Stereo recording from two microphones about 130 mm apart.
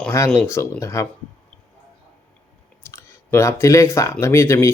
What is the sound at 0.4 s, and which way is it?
Speech, 20° left (ahead or behind).